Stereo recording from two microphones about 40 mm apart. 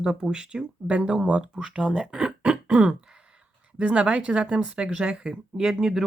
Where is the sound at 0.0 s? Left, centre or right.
Centre.